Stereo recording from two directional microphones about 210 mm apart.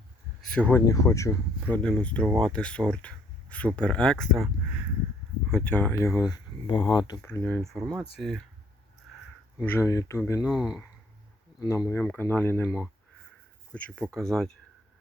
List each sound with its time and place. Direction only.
0.5 s speech: 10° left (ahead or behind)
5.5 s speech: 5° left (ahead or behind); by 7.2 s 20° left (ahead or behind)
7.2 s speech: 10° left (ahead or behind)
9.6 s speech: 10° left (ahead or behind)
11.6 s speech: 15° left (ahead or behind)